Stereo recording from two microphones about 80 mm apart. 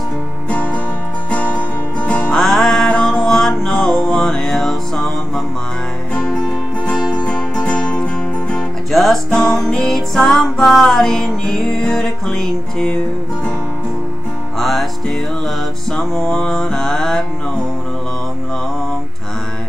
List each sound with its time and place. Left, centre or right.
1.3 s music: centre
2.3 s music: centre
8.9 s music: centre
14.6 s music: centre